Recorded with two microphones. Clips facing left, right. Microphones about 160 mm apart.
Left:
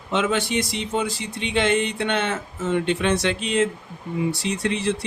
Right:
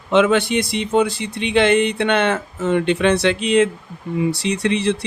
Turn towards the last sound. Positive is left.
turn(degrees=-75)  # may be behind; listen again after turning